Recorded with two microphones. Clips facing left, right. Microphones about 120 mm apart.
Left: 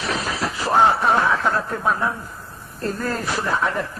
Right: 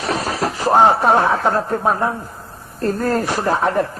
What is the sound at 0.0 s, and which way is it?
Speech, 45° right (ahead or behind).